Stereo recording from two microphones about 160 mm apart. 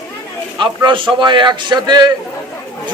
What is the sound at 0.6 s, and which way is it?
A man's voice, 30° right (ahead or behind).